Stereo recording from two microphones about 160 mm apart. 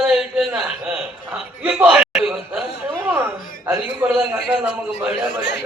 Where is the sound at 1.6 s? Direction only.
10° right (ahead or behind).